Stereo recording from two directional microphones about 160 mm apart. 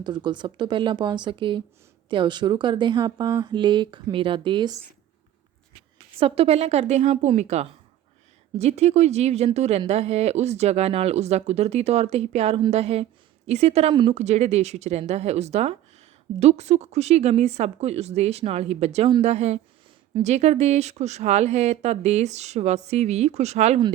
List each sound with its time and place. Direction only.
0.0 s speech: 25° right (ahead or behind)
6.1 s speech: 35° right (ahead or behind)
14.1 s speech: 45° right (ahead or behind)